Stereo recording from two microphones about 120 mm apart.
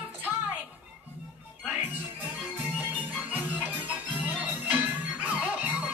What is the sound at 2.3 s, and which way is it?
Music, 15° right (ahead or behind).